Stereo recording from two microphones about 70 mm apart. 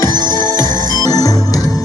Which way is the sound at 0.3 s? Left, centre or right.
Left.